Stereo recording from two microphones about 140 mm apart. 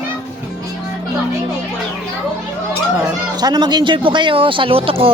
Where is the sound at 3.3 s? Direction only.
30° right (ahead or behind).